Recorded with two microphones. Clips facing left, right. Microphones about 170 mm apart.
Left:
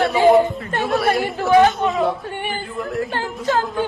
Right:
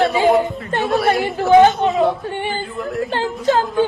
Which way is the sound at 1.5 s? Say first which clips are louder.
Right 3 dB; 20° right (ahead or behind).